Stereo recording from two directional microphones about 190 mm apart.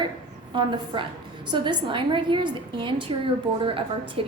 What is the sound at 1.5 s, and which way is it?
A woman's voice, 25° right (ahead or behind).